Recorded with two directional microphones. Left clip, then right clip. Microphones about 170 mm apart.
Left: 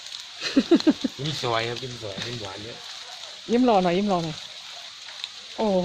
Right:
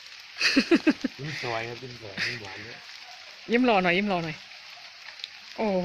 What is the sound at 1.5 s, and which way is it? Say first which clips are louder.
Speech: left 6 dB; 10° left (ahead or behind).